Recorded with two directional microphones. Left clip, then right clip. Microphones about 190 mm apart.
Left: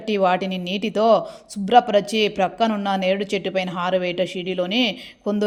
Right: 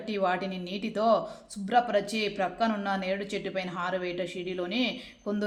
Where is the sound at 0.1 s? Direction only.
35° left (ahead or behind).